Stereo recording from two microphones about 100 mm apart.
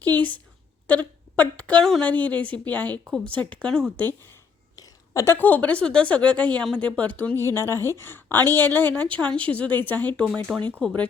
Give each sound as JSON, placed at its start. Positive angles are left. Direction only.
{"t": 0.2, "sound": "a woman's voice", "side_deg": 15}
{"t": 1.8, "sound": "speech", "side_deg": 5}
{"t": 2.0, "sound": "speech", "side_deg": 15}
{"t": 4.8, "sound": "a woman's voice", "side_deg": 30}
{"t": 7.5, "sound": "a woman's voice", "side_deg": 25}